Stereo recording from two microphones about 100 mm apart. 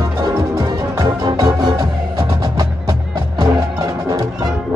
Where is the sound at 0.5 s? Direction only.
40° right (ahead or behind).